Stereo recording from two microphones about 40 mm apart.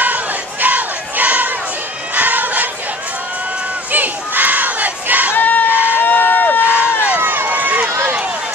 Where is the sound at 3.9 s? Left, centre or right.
Right.